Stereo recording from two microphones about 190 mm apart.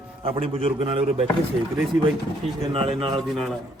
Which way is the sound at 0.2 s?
30° right (ahead or behind).